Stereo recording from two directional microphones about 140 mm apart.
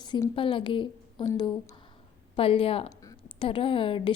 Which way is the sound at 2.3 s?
40° left (ahead or behind).